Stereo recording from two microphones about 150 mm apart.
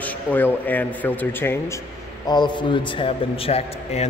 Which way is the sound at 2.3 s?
30° left (ahead or behind).